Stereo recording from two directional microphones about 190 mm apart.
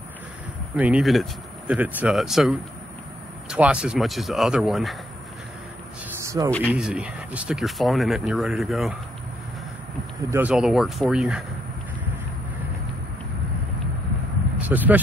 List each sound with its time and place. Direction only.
0.7 s speech: 5° right (ahead or behind)
6.2 s a sound: 15° right (ahead or behind)
6.7 s speech: 5° right (ahead or behind)
10.3 s speech: 5° right (ahead or behind)
14.6 s speech: 10° right (ahead or behind)